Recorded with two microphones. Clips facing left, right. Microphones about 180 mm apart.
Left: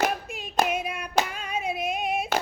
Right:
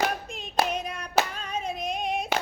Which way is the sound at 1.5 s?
10° left (ahead or behind).